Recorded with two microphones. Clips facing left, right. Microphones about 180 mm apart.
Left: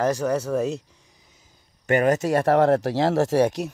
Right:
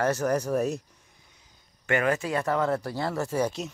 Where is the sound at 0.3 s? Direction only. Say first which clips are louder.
Left 2 dB; 10° right (ahead or behind).